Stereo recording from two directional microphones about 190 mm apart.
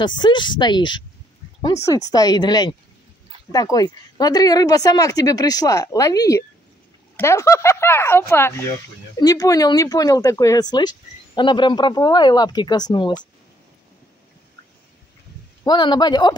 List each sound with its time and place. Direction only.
0.0 s speech: 25° left (ahead or behind)
15.6 s speech: 25° left (ahead or behind)